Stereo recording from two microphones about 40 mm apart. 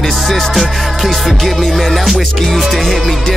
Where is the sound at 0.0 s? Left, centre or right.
Centre.